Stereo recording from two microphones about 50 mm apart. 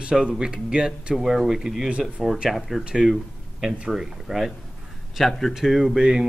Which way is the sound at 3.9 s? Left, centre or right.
Centre.